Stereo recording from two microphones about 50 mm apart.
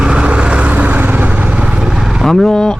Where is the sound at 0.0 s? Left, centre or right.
Centre.